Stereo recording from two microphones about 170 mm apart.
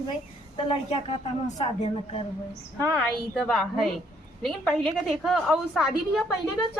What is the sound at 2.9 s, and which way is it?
A woman's voice, centre (ahead or behind).